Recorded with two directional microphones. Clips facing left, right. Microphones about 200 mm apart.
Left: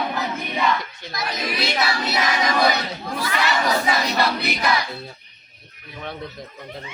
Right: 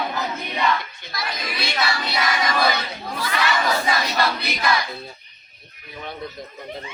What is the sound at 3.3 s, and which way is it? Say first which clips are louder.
Speech: even; 10° left (ahead or behind).